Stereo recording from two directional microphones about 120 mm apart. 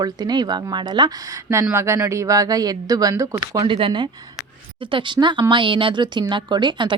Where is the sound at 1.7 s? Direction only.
20° right (ahead or behind).